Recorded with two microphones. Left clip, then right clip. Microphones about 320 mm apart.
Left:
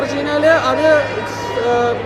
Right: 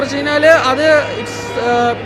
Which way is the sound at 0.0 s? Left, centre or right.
Right.